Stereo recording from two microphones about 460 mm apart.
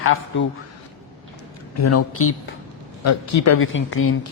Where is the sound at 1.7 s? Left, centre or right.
Left.